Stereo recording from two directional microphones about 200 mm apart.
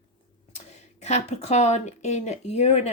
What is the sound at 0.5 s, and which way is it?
A woman's voice, 35° left (ahead or behind).